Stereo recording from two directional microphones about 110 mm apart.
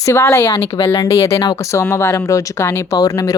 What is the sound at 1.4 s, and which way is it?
Speech, 40° left (ahead or behind).